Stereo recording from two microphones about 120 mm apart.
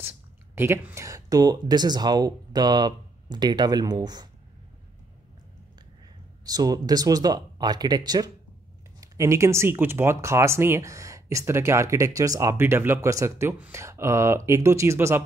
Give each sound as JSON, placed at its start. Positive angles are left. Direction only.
{"t": 0.6, "sound": "speech", "side_deg": -20}
{"t": 6.4, "sound": "speech", "side_deg": -30}